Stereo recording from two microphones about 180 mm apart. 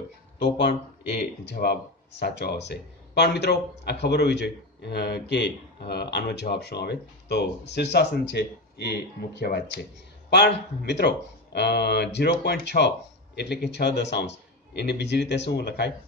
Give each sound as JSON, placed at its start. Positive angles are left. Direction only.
{"t": 1.4, "sound": "speech", "side_deg": 65}